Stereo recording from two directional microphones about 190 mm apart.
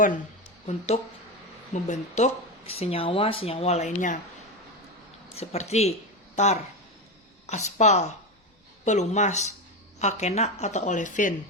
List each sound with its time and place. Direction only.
1.7 s speech: 40° left (ahead or behind)
5.4 s speech: 35° left (ahead or behind)